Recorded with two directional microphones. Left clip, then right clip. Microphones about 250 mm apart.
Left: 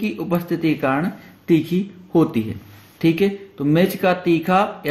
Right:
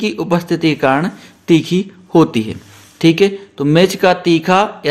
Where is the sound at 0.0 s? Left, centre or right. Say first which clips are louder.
Right 7 dB; right.